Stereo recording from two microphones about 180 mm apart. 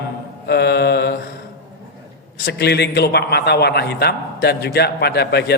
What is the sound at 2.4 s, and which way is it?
A man's voice, 65° left (ahead or behind).